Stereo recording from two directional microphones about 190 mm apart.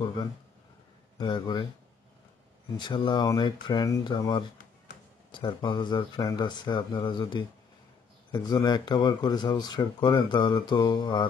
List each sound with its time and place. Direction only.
1.1 s speech: 20° left (ahead or behind)
2.8 s speech: 25° left (ahead or behind)